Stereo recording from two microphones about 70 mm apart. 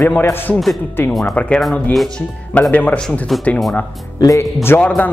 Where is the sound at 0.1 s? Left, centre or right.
Left.